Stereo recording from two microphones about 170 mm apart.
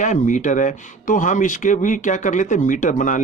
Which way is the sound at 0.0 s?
45° left (ahead or behind).